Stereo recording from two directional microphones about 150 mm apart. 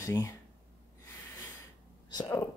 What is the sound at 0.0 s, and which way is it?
Speech, 20° left (ahead or behind).